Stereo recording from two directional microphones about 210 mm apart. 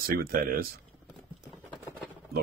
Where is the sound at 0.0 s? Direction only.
45° right (ahead or behind).